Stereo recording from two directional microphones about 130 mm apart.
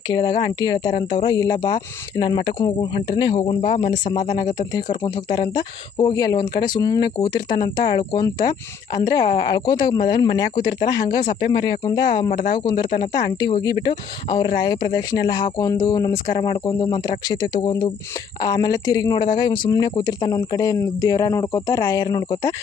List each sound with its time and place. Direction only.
0.1 s speech: 30° left (ahead or behind); by 4.2 s 50° left (ahead or behind)
4.7 s speech: 30° left (ahead or behind)
18.3 s speech: 30° left (ahead or behind)